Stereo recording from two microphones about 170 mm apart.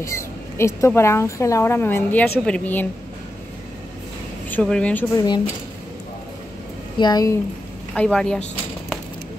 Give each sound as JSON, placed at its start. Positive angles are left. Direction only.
{"t": 0.0, "sound": "speech", "side_deg": 15}
{"t": 4.5, "sound": "speech", "side_deg": 5}
{"t": 5.1, "sound": "speech", "side_deg": 25}
{"t": 7.0, "sound": "speech", "side_deg": 25}
{"t": 7.9, "sound": "speech", "side_deg": 5}